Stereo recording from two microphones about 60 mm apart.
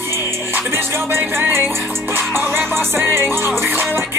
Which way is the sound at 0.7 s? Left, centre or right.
Right.